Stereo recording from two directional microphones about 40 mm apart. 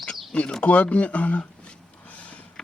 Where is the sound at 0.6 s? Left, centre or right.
Left.